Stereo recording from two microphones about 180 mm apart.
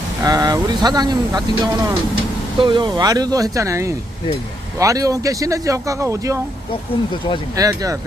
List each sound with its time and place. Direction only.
0.2 s speech: 20° right (ahead or behind)
7.5 s speech: 20° right (ahead or behind)